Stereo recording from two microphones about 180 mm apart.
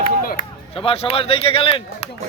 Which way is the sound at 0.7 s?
30° left (ahead or behind).